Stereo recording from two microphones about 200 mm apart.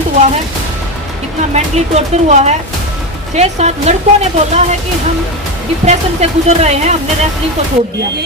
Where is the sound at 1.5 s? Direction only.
35° right (ahead or behind).